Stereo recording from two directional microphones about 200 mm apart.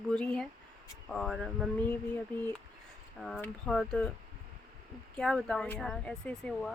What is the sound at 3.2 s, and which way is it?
Speech, 5° left (ahead or behind).